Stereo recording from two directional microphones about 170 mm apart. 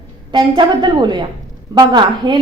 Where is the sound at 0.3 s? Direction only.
25° right (ahead or behind).